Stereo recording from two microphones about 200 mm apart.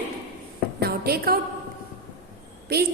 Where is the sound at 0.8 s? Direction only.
50° right (ahead or behind).